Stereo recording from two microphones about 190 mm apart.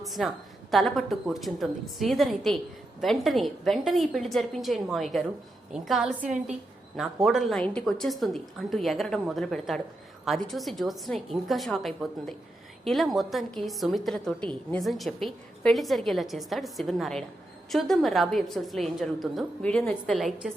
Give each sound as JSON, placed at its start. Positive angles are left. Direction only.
{"t": 0.0, "sound": "a woman's voice", "side_deg": 0}
{"t": 6.2, "sound": "a woman's voice", "side_deg": -40}
{"t": 6.9, "sound": "a woman's voice", "side_deg": 0}